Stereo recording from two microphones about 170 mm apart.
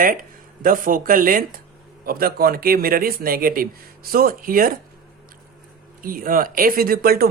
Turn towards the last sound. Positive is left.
turn(degrees=-65)  # may be behind; listen again after turning